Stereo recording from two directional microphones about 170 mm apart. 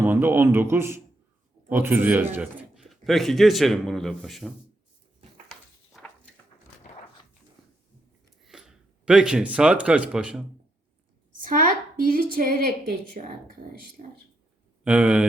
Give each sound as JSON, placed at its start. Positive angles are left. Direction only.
{"t": 0.0, "sound": "a man's voice", "side_deg": -15}
{"t": 6.0, "sound": "walk", "side_deg": 0}
{"t": 8.4, "sound": "speech", "side_deg": -5}
{"t": 11.4, "sound": "a woman's voice", "side_deg": -50}
{"t": 12.3, "sound": "a sound", "side_deg": -60}
{"t": 14.0, "sound": "speech", "side_deg": -40}
{"t": 14.8, "sound": "speech", "side_deg": -5}